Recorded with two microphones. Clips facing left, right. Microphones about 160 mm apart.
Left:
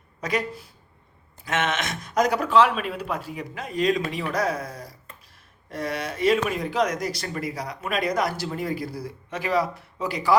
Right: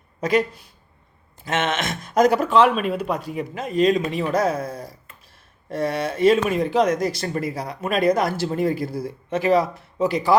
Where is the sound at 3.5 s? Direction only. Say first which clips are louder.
Right 5 dB; 25° right (ahead or behind).